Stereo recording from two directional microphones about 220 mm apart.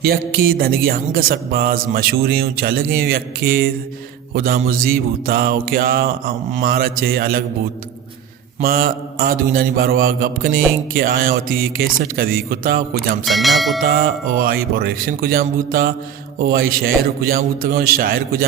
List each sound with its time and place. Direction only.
0.0 s music: 45° right (ahead or behind)
4.4 s mantra: 40° right (ahead or behind)
8.6 s mantra: 40° right (ahead or behind)
13.2 s speech: centre (ahead or behind)
13.8 s music: 45° right (ahead or behind)